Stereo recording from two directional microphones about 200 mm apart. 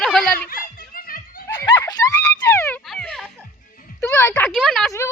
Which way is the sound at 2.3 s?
10° left (ahead or behind).